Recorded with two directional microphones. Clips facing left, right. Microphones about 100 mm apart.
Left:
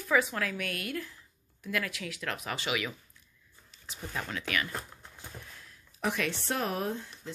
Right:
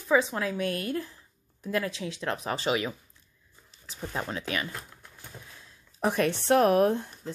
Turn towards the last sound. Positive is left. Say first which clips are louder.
# right 8 dB
turn(degrees=-50)  # may be behind; listen again after turning